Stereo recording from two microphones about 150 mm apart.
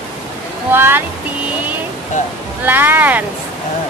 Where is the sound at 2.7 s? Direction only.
15° right (ahead or behind).